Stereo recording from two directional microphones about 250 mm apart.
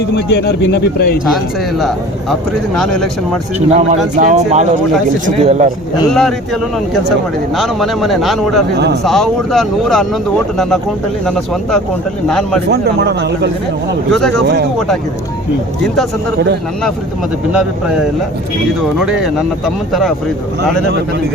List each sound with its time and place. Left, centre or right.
0.1 s speech: left
2.7 s speech: centre
3.8 s a man's voice: right
6.1 s speech: centre
8.7 s a man's voice: right
9.0 s speech: centre
11.3 s speech: centre
12.7 s a man's voice: right
14.1 s speech: centre
14.4 s a man's voice: right
17.5 s speech: centre
18.9 s speech: centre